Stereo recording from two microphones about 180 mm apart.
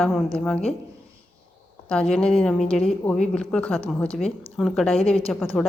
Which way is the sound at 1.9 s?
5° left (ahead or behind).